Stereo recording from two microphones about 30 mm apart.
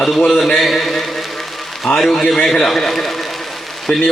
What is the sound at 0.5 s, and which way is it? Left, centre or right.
A man's voice, centre.